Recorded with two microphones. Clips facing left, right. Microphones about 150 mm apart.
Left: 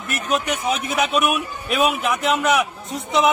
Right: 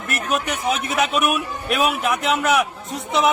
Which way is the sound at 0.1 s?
Centre (ahead or behind).